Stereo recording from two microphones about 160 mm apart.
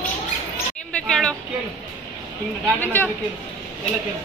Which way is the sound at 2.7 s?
10° left (ahead or behind).